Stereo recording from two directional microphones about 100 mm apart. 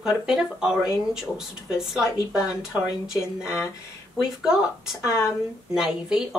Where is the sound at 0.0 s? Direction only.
5° right (ahead or behind).